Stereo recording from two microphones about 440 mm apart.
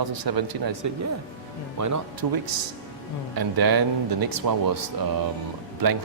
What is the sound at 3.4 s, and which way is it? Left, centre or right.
A man's voice, right.